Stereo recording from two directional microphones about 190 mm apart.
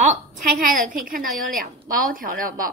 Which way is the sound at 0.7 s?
45° right (ahead or behind).